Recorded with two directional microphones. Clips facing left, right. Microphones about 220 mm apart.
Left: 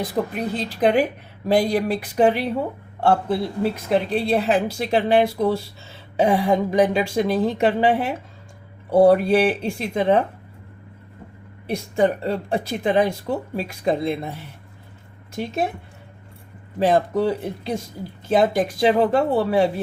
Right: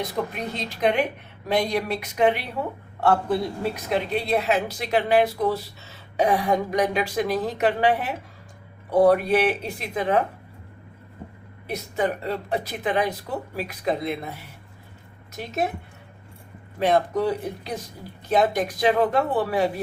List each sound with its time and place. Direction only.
0.2 s a woman's voice: 35° left (ahead or behind)
11.7 s a woman's voice: 30° left (ahead or behind)
16.8 s a woman's voice: 30° left (ahead or behind)